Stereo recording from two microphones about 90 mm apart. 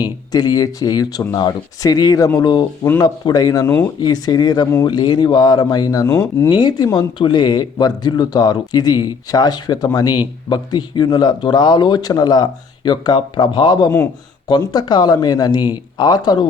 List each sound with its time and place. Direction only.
0.0 s speech: 50° left (ahead or behind)
2.4 s speech: 55° left (ahead or behind)
6.5 s speech: 55° left (ahead or behind)